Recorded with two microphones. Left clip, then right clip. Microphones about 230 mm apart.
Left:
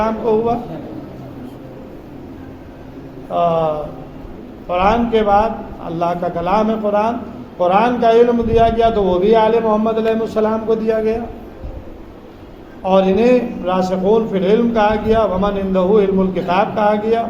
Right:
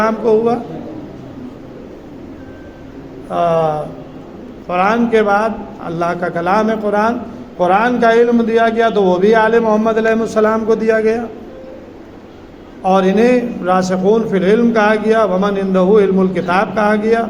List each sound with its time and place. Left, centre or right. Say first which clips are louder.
0.0 s a woman's voice: right 3 dB; right
3.3 s a man's voice: right 2 dB; right
4.7 s a man's voice: right 1 dB; right
12.8 s a man's voice: right 1 dB; right